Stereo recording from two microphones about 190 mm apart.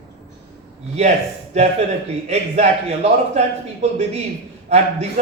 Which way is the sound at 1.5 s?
35° right (ahead or behind).